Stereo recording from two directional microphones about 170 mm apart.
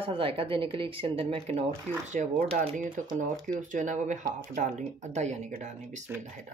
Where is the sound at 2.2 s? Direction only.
50° right (ahead or behind).